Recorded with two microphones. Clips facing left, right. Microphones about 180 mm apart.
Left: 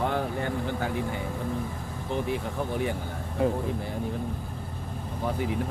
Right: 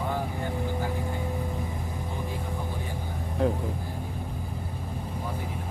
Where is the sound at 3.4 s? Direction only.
5° left (ahead or behind).